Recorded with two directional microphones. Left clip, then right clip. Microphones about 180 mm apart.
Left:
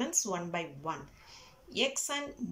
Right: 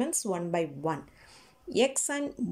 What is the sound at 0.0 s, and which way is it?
Speech, 30° right (ahead or behind).